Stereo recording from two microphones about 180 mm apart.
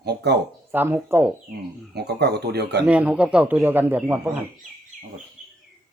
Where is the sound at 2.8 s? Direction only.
5° right (ahead or behind).